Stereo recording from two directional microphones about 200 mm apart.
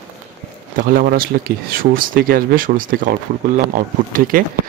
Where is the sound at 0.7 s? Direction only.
45° right (ahead or behind).